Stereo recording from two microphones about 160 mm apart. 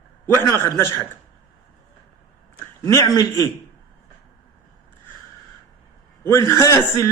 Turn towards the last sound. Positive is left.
turn(degrees=20)  # may be behind; listen again after turning